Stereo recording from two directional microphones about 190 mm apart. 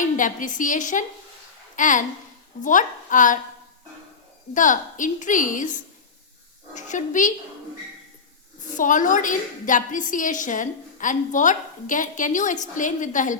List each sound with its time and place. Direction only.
0.0 s a woman's voice: 45° left (ahead or behind)
4.5 s a woman's voice: 45° left (ahead or behind)
8.7 s a woman's voice: 45° left (ahead or behind)